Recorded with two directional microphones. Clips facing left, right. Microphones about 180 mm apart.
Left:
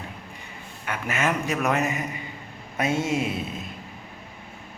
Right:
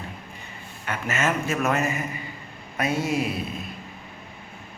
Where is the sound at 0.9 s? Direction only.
15° left (ahead or behind).